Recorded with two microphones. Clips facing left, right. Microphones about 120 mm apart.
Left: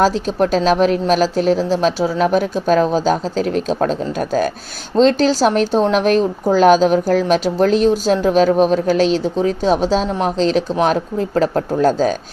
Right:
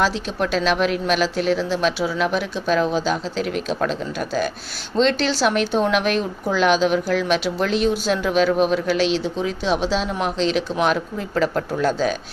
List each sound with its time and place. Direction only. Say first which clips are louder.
0.0 s speech: left 6 dB; 40° left (ahead or behind)